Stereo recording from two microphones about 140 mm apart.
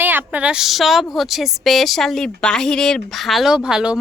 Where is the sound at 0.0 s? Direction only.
15° right (ahead or behind).